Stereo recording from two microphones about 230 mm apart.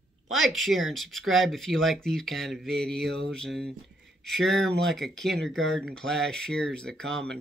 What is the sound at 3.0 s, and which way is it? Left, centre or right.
Mantra, right.